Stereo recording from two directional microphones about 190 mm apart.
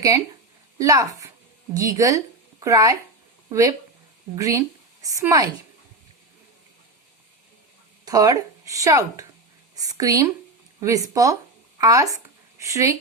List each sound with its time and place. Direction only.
0.8 s a woman's voice: 15° right (ahead or behind)
8.0 s a woman's voice: 20° right (ahead or behind)